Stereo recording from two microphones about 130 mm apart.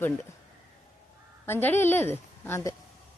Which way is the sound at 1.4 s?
15° left (ahead or behind).